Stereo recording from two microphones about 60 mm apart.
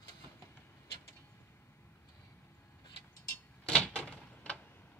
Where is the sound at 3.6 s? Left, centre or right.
Centre.